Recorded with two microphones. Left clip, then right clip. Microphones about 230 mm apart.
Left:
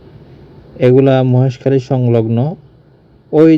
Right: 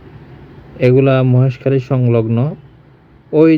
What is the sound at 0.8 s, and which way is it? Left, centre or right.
Speech, centre.